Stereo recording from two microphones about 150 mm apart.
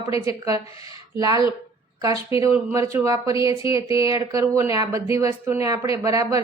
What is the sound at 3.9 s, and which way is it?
Speech, 35° left (ahead or behind).